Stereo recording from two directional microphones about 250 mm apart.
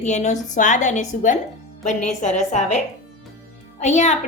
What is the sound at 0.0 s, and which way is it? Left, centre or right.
A woman's voice, left.